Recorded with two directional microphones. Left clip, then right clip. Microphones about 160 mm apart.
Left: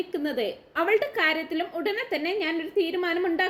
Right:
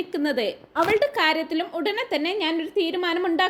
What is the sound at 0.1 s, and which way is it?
A woman's voice, 35° right (ahead or behind).